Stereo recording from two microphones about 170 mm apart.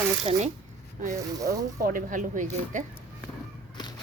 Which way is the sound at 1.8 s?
55° right (ahead or behind).